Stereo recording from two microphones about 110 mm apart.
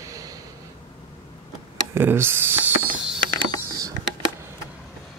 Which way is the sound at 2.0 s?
20° right (ahead or behind).